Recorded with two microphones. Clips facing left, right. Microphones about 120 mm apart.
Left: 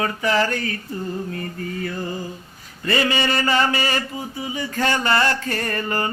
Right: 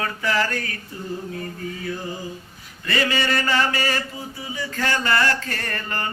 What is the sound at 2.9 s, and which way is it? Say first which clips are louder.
Mantra: left 2 dB; 25° left (ahead or behind).